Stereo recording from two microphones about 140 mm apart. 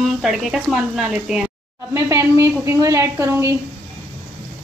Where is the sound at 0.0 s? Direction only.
Centre (ahead or behind).